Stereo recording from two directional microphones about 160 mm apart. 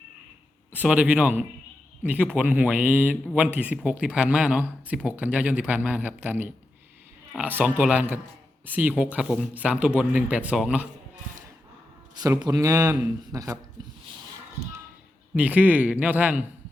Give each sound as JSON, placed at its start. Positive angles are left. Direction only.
{"t": 0.7, "sound": "speech", "side_deg": -10}
{"t": 12.1, "sound": "speech", "side_deg": -25}
{"t": 15.4, "sound": "speech", "side_deg": -10}